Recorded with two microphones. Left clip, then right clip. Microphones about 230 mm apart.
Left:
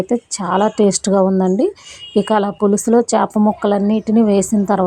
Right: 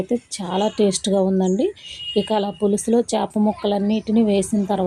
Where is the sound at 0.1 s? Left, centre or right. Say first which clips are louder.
Left 6 dB; centre.